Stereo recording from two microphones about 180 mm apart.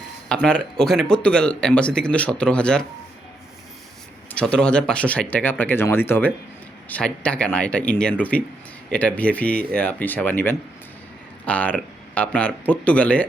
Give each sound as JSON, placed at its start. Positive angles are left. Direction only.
{"t": 0.3, "sound": "speech", "side_deg": 5}
{"t": 4.3, "sound": "speech", "side_deg": 5}